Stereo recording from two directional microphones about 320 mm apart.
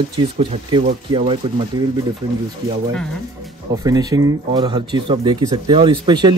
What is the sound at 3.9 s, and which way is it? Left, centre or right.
A man's voice, centre.